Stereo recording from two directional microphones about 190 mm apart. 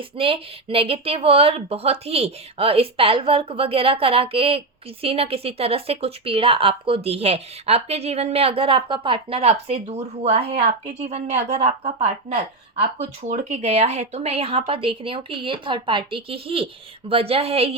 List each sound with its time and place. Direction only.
0.2 s a woman's voice: 30° right (ahead or behind)